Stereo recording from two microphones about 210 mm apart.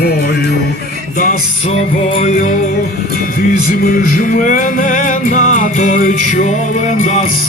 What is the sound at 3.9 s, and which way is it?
Music, 40° left (ahead or behind).